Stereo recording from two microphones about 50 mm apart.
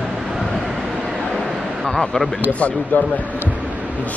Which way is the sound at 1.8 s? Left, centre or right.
Left.